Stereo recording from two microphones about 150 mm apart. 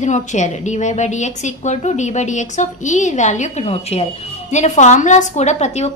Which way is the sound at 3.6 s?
40° left (ahead or behind).